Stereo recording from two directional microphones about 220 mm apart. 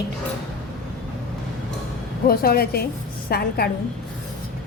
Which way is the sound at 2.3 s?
45° left (ahead or behind).